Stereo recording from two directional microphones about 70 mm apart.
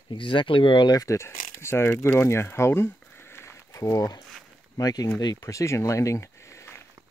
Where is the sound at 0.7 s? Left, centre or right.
Left.